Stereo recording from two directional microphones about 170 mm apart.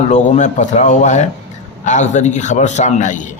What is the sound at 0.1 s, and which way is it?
A man's voice, 45° left (ahead or behind).